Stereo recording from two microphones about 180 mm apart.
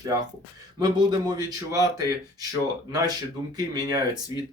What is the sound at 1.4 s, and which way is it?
Speech, 20° right (ahead or behind).